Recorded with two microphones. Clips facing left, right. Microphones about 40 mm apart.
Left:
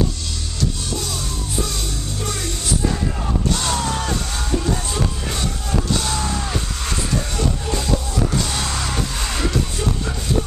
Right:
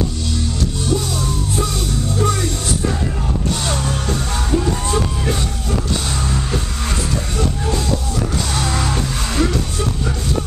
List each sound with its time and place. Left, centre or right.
8.7 s music: centre